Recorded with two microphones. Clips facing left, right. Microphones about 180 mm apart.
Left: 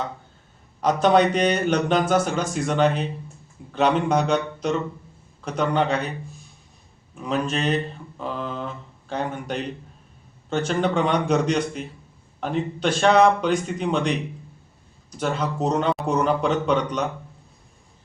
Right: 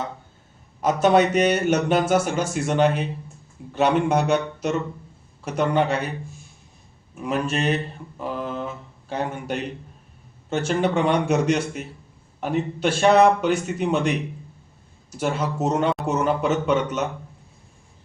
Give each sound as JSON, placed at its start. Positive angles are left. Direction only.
{"t": 0.8, "sound": "speech", "side_deg": -5}
{"t": 7.2, "sound": "speech", "side_deg": -10}